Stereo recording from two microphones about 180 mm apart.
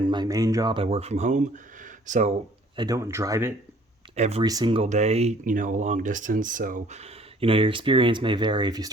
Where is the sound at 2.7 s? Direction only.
20° right (ahead or behind).